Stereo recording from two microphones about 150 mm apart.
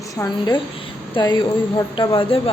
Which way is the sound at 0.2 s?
30° left (ahead or behind).